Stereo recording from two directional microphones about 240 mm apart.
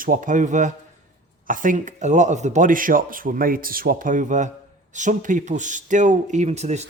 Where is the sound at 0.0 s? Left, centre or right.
Right.